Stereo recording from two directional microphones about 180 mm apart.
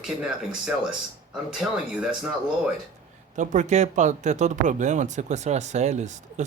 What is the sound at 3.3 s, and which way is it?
Speech, 40° right (ahead or behind).